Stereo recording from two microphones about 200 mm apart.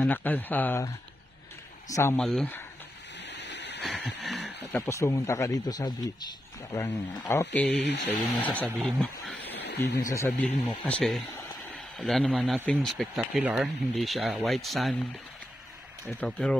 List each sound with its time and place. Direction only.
0.0 s speech: 10° left (ahead or behind)
2.1 s speech: 5° left (ahead or behind)
3.3 s a sound: 60° left (ahead or behind)
3.8 s a sound: centre (ahead or behind)
4.8 s speech: 15° left (ahead or behind)
7.7 s speech: 60° left (ahead or behind)
8.5 s speech: centre (ahead or behind)
9.6 s a sound: 60° left (ahead or behind)
10.1 s speech: 10° left (ahead or behind)
11.3 s a sound: 5° left (ahead or behind)
12.6 s speech: centre (ahead or behind)
16.2 s speech: 5° left (ahead or behind)